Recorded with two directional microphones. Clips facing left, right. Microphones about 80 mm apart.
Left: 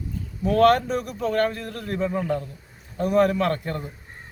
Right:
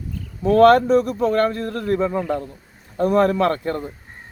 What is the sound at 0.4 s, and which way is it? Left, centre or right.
A man's voice, right.